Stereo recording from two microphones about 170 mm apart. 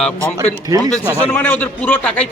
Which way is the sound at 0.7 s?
20° right (ahead or behind).